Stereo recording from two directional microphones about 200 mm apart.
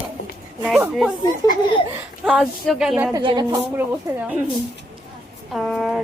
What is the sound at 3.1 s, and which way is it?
Speech, 20° right (ahead or behind).